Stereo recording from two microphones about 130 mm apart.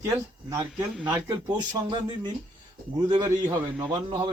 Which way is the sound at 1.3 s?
35° right (ahead or behind).